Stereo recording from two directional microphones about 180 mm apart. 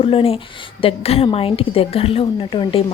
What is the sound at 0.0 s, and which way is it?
A woman's voice, 30° left (ahead or behind).